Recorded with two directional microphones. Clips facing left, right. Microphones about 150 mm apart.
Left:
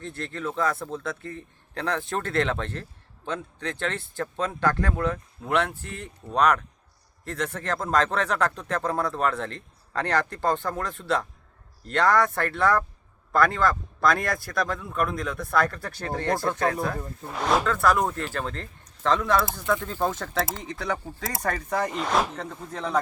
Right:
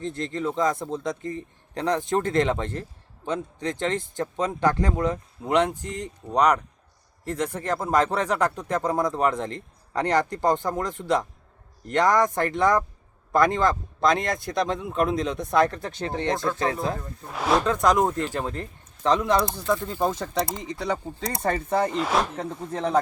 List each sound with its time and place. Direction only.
0.0 s speech: 15° right (ahead or behind)
17.2 s speech: centre (ahead or behind)
17.6 s speech: 15° right (ahead or behind)
21.8 s speech: centre (ahead or behind)
22.4 s speech: 25° right (ahead or behind)